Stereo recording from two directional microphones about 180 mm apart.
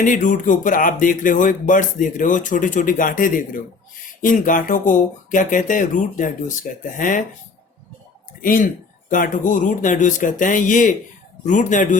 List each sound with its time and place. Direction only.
0.0 s speech: 45° left (ahead or behind)
8.4 s speech: 50° left (ahead or behind)